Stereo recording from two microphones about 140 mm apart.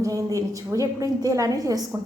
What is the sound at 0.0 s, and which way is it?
A woman's voice, 25° right (ahead or behind).